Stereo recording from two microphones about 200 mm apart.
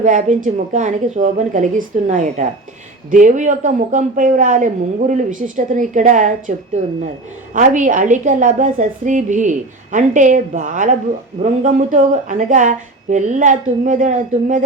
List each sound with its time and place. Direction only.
0.0 s a woman's voice: 40° right (ahead or behind)
7.5 s a woman's voice: 40° right (ahead or behind)